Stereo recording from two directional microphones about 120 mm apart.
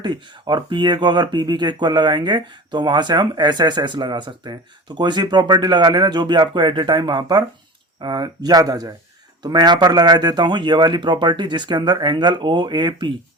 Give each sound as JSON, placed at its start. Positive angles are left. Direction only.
{"t": 0.0, "sound": "speech", "side_deg": -40}